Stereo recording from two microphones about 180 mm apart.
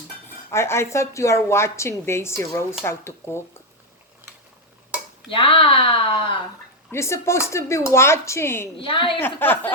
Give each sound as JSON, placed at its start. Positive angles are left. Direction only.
{"t": 0.5, "sound": "a woman's voice", "side_deg": 15}
{"t": 5.3, "sound": "speech", "side_deg": 30}
{"t": 6.9, "sound": "a woman's voice", "side_deg": 15}
{"t": 8.8, "sound": "speech", "side_deg": 30}
{"t": 9.2, "sound": "a woman's voice", "side_deg": 10}